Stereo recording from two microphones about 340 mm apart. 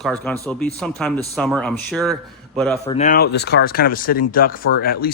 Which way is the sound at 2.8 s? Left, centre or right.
Centre.